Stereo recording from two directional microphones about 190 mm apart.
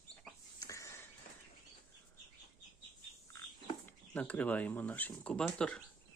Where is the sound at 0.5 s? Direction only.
15° left (ahead or behind).